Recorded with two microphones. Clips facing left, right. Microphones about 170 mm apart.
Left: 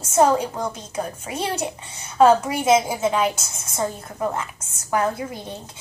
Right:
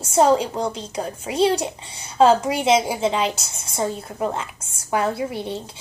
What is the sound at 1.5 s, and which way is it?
Speech, 10° right (ahead or behind).